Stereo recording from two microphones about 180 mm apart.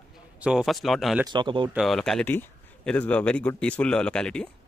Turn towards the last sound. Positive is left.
turn(degrees=5)  # may be behind; listen again after turning